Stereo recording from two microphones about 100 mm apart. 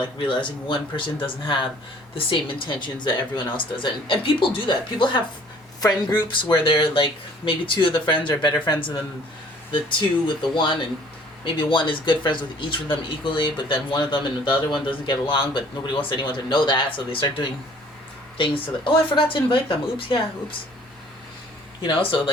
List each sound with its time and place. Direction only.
0.3 s speech: 55° left (ahead or behind)
5.8 s speech: 40° left (ahead or behind)
10.2 s speech: 55° left (ahead or behind)
21.8 s speech: 55° left (ahead or behind)